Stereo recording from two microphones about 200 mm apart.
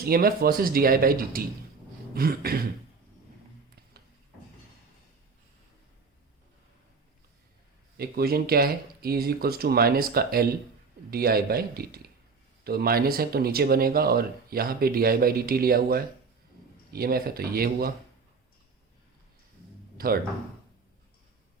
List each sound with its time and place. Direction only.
0.0 s speech: 50° right (ahead or behind)
7.9 s speech: 50° right (ahead or behind)